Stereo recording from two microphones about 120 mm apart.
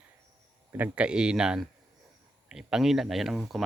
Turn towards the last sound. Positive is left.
turn(degrees=0)  # may be behind; listen again after turning